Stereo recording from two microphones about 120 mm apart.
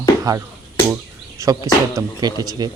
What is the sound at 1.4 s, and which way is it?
Speech, 25° right (ahead or behind).